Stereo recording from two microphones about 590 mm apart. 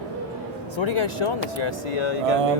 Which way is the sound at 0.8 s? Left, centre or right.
Left.